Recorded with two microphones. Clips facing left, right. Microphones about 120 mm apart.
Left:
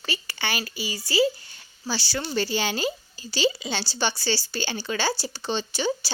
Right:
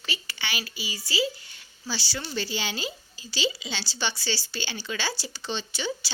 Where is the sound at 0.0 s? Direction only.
45° left (ahead or behind).